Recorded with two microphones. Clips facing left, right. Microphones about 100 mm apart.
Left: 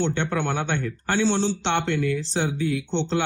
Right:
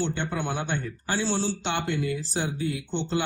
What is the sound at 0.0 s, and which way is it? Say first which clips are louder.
Speech: left 4 dB; 65° left (ahead or behind).